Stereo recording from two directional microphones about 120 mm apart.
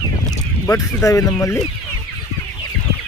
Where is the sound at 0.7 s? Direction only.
25° left (ahead or behind).